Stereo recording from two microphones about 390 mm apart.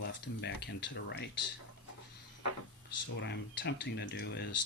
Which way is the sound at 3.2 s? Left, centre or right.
Left.